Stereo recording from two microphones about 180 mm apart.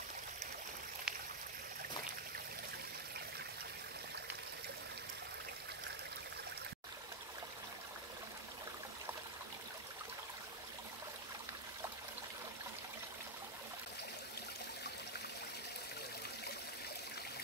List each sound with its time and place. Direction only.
1.1 s stream: 5° right (ahead or behind)